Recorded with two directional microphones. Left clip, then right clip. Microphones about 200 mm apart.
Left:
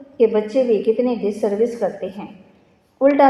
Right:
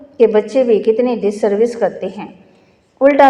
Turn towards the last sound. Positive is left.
turn(degrees=-30)  # may be behind; listen again after turning